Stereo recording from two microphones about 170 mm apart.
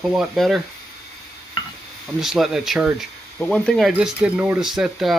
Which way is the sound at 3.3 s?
10° left (ahead or behind).